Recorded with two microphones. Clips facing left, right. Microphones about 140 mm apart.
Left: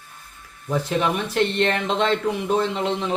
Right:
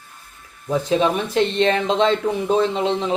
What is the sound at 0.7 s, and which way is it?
Speech, 20° right (ahead or behind).